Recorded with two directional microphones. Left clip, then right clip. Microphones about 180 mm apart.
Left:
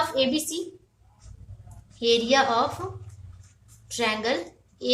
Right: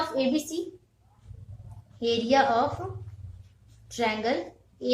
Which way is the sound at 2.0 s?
30° left (ahead or behind).